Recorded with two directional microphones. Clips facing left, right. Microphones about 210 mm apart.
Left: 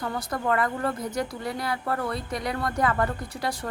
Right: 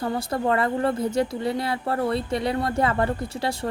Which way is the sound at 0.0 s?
25° right (ahead or behind).